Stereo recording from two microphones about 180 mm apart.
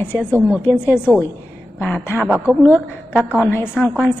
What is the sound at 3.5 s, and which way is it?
Speech, 10° left (ahead or behind).